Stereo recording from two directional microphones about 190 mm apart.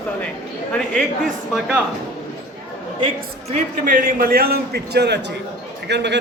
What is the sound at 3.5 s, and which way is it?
A man's voice, 45° right (ahead or behind).